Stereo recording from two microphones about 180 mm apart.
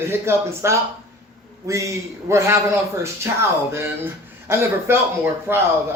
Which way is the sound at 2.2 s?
15° right (ahead or behind).